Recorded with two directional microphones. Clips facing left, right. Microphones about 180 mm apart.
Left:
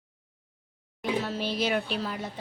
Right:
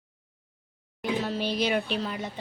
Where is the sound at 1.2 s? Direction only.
Centre (ahead or behind).